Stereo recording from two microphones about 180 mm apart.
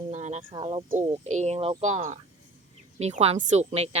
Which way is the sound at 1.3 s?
40° right (ahead or behind).